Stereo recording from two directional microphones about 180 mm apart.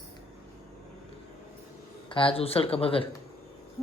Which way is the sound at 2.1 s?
30° left (ahead or behind).